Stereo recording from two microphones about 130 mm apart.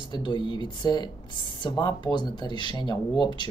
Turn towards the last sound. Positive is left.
turn(degrees=35)  # may be behind; listen again after turning